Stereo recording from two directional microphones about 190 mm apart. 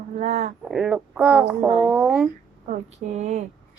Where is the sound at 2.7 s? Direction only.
35° right (ahead or behind).